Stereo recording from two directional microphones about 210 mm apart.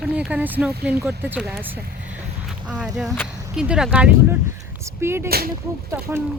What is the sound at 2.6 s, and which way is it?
Speech, 5° right (ahead or behind).